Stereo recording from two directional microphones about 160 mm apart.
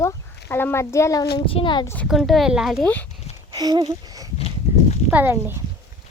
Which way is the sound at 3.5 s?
25° right (ahead or behind).